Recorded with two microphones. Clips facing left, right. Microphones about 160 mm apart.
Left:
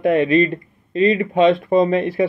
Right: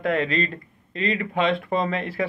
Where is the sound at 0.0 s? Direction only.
20° left (ahead or behind).